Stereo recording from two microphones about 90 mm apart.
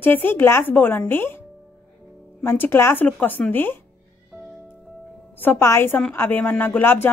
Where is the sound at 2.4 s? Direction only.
25° left (ahead or behind).